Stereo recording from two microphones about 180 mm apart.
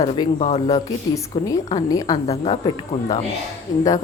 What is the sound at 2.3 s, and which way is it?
Speech, 35° left (ahead or behind).